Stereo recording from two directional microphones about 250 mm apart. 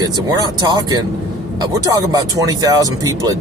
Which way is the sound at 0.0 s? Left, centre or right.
Centre.